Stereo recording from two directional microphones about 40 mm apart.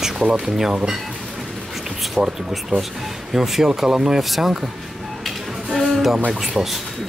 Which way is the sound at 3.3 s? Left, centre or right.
Centre.